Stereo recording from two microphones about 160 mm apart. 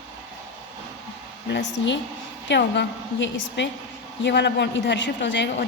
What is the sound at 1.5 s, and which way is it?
A woman's voice, 90° left.